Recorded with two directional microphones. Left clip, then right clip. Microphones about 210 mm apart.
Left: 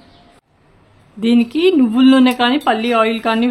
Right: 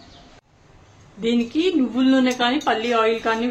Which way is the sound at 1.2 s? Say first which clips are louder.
Left 6 dB; 50° left (ahead or behind).